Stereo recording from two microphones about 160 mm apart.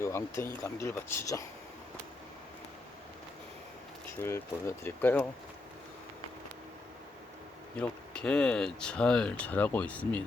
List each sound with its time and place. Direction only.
0.0 s speech: 15° left (ahead or behind)
4.2 s speech: 15° left (ahead or behind)
7.8 s speech: 5° left (ahead or behind)